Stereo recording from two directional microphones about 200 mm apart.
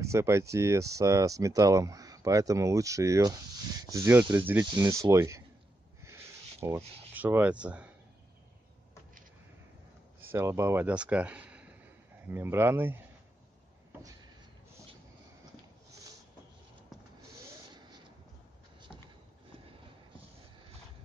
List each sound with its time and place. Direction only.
0.0 s speech: 15° right (ahead or behind)
6.6 s speech: 15° right (ahead or behind)
10.3 s speech: 15° right (ahead or behind)